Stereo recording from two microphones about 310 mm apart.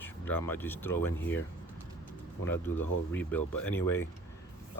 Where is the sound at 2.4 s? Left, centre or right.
Centre.